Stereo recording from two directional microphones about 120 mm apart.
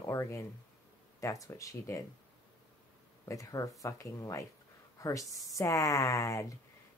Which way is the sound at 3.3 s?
25° left (ahead or behind).